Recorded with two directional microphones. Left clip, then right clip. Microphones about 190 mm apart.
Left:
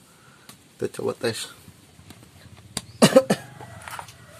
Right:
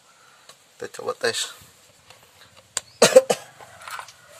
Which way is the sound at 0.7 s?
5° right (ahead or behind).